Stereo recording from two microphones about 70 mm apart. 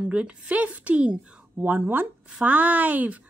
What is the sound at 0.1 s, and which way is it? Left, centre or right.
Speech, centre.